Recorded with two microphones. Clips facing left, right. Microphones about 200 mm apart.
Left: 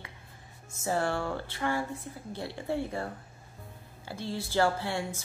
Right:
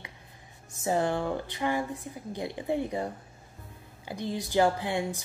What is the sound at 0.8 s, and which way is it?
Speech, 15° right (ahead or behind).